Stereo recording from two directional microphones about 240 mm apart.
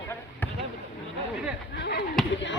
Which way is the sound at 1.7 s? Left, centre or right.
Left.